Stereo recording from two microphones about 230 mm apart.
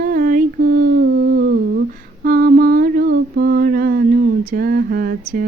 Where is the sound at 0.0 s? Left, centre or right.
Right.